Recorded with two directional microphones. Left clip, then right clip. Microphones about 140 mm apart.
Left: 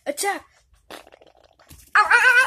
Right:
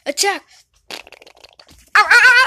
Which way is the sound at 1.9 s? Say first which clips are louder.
Right 6 dB; 35° right (ahead or behind).